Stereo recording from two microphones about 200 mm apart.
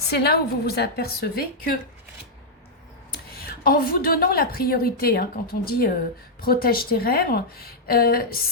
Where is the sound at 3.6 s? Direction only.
45° left (ahead or behind).